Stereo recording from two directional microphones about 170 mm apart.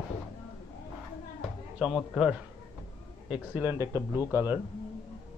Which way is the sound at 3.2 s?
10° right (ahead or behind).